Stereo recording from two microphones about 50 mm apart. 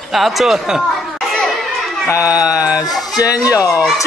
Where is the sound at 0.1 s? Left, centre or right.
Centre.